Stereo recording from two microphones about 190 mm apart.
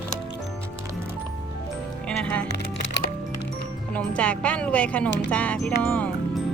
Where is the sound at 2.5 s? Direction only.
55° left (ahead or behind).